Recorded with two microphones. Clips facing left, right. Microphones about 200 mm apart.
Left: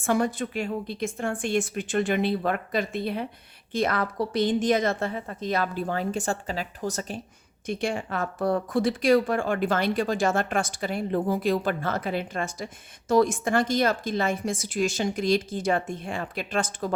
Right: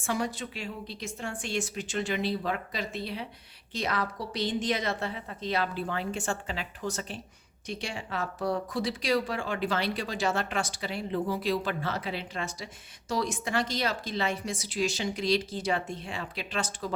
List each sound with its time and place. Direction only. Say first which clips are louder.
0.0 s speech: left 7 dB; 50° left (ahead or behind)
7.7 s speech: left 7 dB; 50° left (ahead or behind)